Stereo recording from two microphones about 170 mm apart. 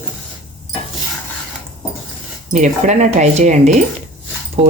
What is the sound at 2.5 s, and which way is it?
Speech, 45° right (ahead or behind).